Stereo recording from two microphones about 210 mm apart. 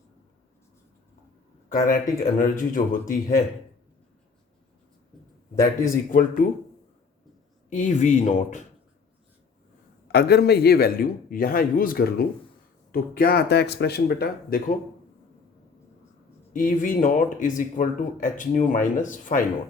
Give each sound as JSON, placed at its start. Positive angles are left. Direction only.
{"t": 1.7, "sound": "speech", "side_deg": 40}
{"t": 5.8, "sound": "speech", "side_deg": 40}
{"t": 7.7, "sound": "speech", "side_deg": 35}
{"t": 10.1, "sound": "a man's voice", "side_deg": 50}
{"t": 16.5, "sound": "speech", "side_deg": 40}